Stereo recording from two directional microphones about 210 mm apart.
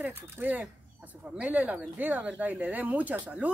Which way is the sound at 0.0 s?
10° right (ahead or behind).